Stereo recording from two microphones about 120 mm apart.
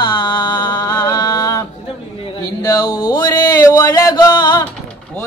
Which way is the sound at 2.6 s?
35° left (ahead or behind).